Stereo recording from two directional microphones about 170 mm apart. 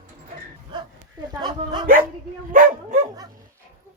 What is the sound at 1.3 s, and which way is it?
Speech, 25° right (ahead or behind).